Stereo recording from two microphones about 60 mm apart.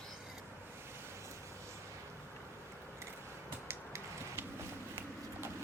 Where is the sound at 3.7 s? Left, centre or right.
Right.